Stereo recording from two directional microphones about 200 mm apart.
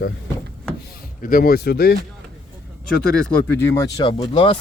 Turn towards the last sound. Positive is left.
turn(degrees=25)  # may be behind; listen again after turning